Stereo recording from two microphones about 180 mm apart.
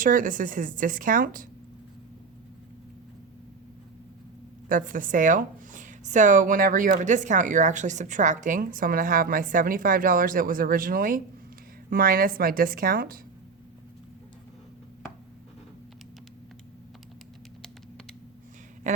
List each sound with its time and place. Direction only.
0.0 s speech: 50° right (ahead or behind)
4.7 s speech: 50° right (ahead or behind)